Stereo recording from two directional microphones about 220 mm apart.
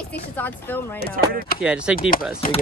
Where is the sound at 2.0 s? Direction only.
40° left (ahead or behind).